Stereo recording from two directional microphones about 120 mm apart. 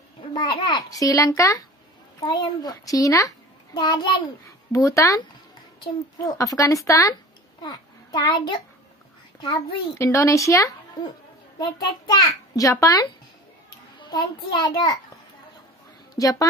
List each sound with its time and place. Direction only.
0.2 s a child's voice: 40° left (ahead or behind)
4.5 s a woman's voice: 25° left (ahead or behind)
6.2 s a child's voice: 30° left (ahead or behind)
7.6 s a child's voice: 35° left (ahead or behind)
9.9 s a child's voice: 25° left (ahead or behind)
11.6 s a child's voice: 35° left (ahead or behind)
16.2 s a child's voice: 30° left (ahead or behind)